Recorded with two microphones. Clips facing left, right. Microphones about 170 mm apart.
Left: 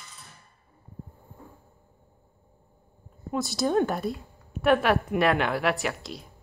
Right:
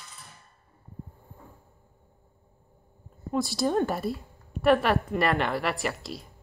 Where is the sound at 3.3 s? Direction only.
Centre (ahead or behind).